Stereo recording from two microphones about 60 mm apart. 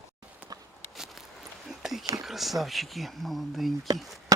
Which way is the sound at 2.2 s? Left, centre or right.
Centre.